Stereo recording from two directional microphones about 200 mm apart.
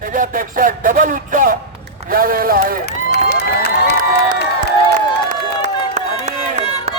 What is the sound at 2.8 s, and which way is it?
Crowd, 55° left (ahead or behind).